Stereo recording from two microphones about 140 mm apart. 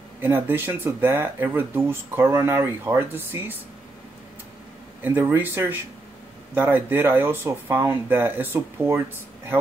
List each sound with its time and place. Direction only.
0.2 s speech: 15° right (ahead or behind)
5.0 s speech: 15° right (ahead or behind)